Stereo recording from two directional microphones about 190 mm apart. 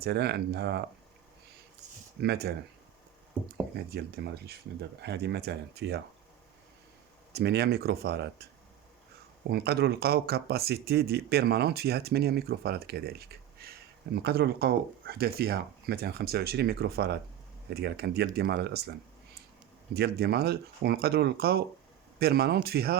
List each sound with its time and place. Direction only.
0.0 s speech: 60° right (ahead or behind)
2.2 s speech: 60° right (ahead or behind)
3.9 s speech: 55° right (ahead or behind)
7.3 s speech: 60° right (ahead or behind)
9.5 s speech: 60° right (ahead or behind)